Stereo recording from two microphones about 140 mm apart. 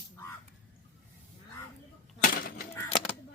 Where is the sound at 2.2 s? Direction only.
90° left.